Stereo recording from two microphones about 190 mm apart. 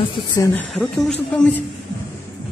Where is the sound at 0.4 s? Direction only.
5° left (ahead or behind).